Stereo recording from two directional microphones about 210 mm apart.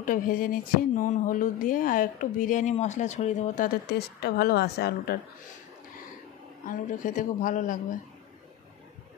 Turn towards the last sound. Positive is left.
turn(degrees=40)  # may be behind; listen again after turning